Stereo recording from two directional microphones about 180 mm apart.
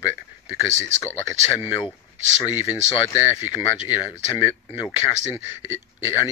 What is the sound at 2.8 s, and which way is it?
Speech, 15° left (ahead or behind).